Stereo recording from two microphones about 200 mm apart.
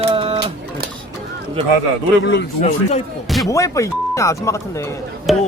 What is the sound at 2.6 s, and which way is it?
Speech, 35° left (ahead or behind).